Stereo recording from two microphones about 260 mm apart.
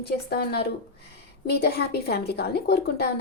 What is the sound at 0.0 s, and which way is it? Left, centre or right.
A woman's voice, left.